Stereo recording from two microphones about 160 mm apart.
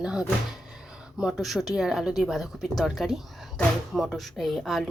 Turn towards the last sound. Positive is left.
turn(degrees=0)  # may be behind; listen again after turning